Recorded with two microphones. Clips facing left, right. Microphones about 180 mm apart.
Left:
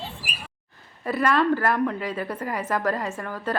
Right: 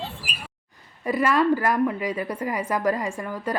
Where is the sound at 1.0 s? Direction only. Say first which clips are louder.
Right 1 dB; 10° right (ahead or behind).